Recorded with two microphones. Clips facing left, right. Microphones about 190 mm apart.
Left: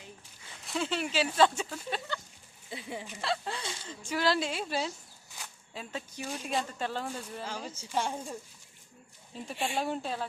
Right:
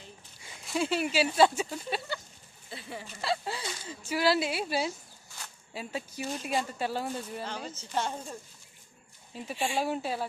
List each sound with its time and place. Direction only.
0.3 s a sound: 10° right (ahead or behind)
0.6 s speech: 5° right (ahead or behind)
2.6 s a woman's voice: 15° left (ahead or behind)
3.2 s speech: 5° right (ahead or behind)
7.4 s a woman's voice: 10° left (ahead or behind)
9.3 s speech: 5° right (ahead or behind)